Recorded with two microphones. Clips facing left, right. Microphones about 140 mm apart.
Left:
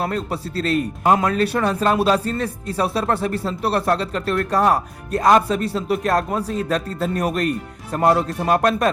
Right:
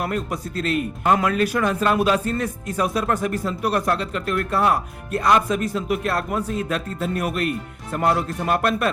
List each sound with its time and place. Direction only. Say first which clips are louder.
0.0 s speech: left 2 dB; 35° left (ahead or behind)